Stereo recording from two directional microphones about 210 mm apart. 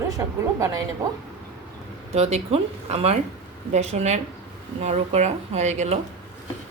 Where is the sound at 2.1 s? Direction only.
30° right (ahead or behind).